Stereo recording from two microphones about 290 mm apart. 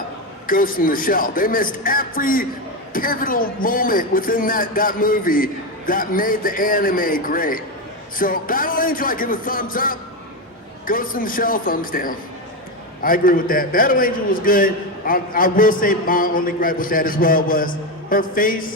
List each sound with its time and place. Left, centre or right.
0.4 s a man's voice: left